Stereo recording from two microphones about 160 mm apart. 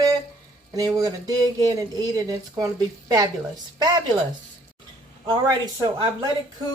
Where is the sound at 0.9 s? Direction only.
25° right (ahead or behind).